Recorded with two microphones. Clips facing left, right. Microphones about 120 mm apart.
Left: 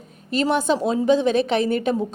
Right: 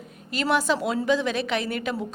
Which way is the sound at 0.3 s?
25° left (ahead or behind).